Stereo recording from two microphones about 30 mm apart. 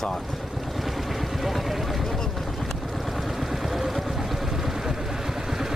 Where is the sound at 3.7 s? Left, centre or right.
Centre.